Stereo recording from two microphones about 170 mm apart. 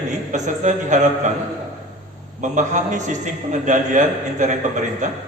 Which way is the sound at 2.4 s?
45° right (ahead or behind).